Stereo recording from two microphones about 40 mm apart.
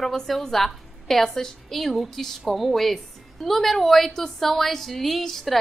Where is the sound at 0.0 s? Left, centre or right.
Centre.